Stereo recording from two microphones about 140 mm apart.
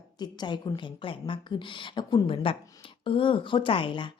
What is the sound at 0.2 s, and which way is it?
A woman's voice, 30° left (ahead or behind).